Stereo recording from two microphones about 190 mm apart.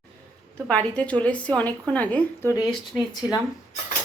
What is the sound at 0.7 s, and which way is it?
A woman's voice, 5° left (ahead or behind).